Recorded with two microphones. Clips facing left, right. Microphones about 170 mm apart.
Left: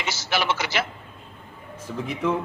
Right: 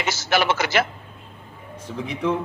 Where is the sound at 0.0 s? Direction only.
50° right (ahead or behind).